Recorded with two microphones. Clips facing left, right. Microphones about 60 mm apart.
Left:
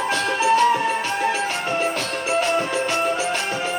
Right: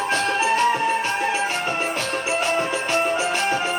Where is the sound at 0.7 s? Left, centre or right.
Centre.